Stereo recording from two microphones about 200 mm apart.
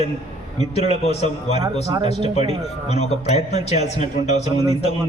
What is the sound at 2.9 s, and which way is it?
A man's voice, 35° left (ahead or behind).